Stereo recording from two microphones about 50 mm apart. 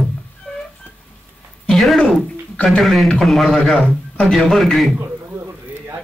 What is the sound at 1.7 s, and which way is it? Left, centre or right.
Speech, centre.